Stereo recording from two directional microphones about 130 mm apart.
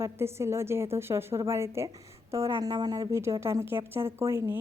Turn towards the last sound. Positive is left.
turn(degrees=-20)  # may be behind; listen again after turning